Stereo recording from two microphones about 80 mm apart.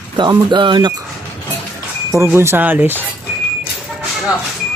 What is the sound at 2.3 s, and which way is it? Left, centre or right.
Speech, right.